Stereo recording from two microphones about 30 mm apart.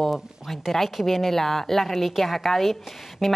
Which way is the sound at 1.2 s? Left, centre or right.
Centre.